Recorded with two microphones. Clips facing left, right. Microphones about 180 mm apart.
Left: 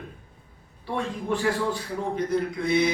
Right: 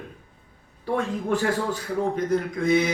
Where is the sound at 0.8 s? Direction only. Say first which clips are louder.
Right 3 dB; 45° right (ahead or behind).